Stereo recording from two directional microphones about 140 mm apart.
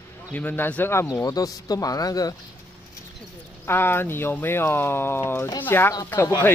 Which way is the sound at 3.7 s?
15° left (ahead or behind).